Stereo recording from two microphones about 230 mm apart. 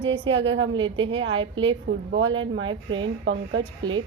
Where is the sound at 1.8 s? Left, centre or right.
Right.